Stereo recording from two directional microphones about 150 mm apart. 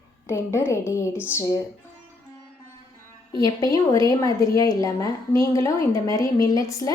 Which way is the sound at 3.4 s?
25° left (ahead or behind).